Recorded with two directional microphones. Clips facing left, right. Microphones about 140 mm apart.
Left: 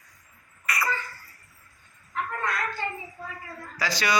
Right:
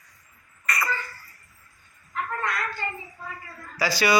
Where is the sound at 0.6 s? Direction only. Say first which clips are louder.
Right 1 dB; 5° left (ahead or behind).